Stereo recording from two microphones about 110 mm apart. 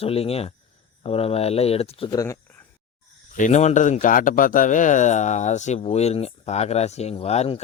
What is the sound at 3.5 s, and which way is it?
Speech, 90° left.